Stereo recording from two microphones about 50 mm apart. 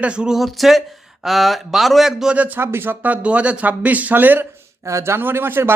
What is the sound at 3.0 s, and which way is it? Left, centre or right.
Speech, right.